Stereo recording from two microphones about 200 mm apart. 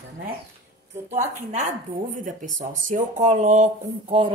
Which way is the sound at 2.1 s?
40° right (ahead or behind).